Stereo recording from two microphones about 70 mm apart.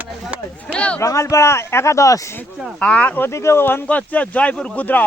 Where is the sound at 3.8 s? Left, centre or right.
Left.